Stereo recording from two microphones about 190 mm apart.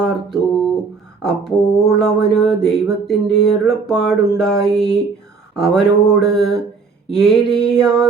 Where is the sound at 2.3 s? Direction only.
Centre (ahead or behind).